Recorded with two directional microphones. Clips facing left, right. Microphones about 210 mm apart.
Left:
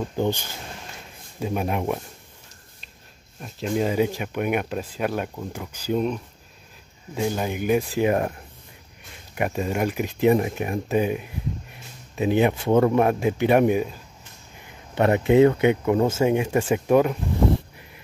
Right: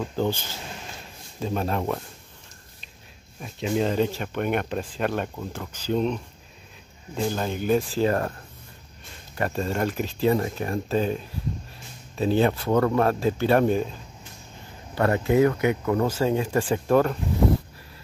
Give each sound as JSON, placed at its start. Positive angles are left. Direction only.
{"t": 0.0, "sound": "speech", "side_deg": 15}
{"t": 3.3, "sound": "speech", "side_deg": 0}
{"t": 7.2, "sound": "speech", "side_deg": 10}
{"t": 15.0, "sound": "speech", "side_deg": 20}
{"t": 16.8, "sound": "speech", "side_deg": 10}